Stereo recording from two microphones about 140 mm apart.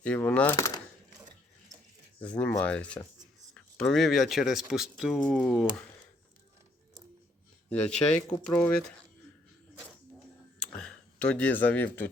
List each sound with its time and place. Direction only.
0.0 s speech: 10° left (ahead or behind)
0.5 s speech: 25° left (ahead or behind)
2.2 s speech: 10° left (ahead or behind)
7.7 s speech: 5° left (ahead or behind)
10.6 s a sound: 5° left (ahead or behind)